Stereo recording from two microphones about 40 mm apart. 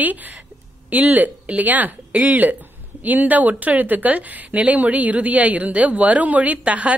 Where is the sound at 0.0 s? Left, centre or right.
Right.